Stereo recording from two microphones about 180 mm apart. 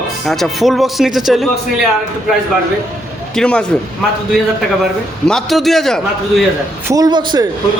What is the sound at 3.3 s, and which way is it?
Speech, 5° left (ahead or behind).